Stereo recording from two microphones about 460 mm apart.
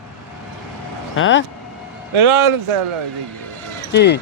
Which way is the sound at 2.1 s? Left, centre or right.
Right.